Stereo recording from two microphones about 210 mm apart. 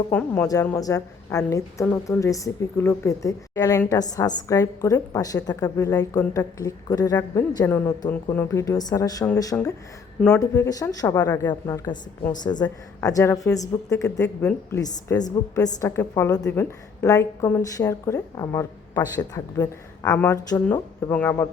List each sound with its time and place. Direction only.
0.1 s a woman's voice: 10° left (ahead or behind)
10.2 s speech: 5° left (ahead or behind)
10.4 s a woman's voice: 15° left (ahead or behind)